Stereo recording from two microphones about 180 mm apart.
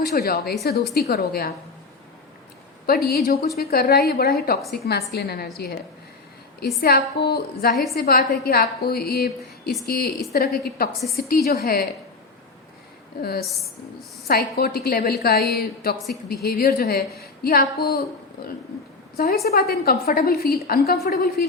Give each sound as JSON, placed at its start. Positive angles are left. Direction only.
{"t": 0.0, "sound": "a woman's voice", "side_deg": 60}
{"t": 2.8, "sound": "a woman's voice", "side_deg": 60}
{"t": 6.8, "sound": "a woman's voice", "side_deg": 60}
{"t": 14.3, "sound": "a woman's voice", "side_deg": 60}